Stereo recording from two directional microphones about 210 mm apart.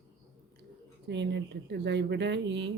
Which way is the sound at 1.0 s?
55° right (ahead or behind).